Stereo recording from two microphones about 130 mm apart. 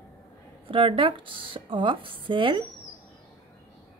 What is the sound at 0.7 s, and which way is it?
A woman's voice, 45° right (ahead or behind).